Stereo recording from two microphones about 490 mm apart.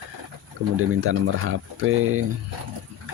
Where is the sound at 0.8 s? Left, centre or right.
Right.